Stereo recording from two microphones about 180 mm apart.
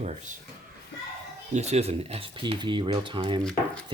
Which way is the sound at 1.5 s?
35° right (ahead or behind).